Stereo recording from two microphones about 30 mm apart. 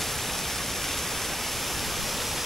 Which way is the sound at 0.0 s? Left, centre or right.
Centre.